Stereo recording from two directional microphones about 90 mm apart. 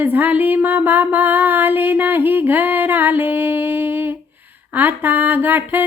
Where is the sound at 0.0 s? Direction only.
20° right (ahead or behind).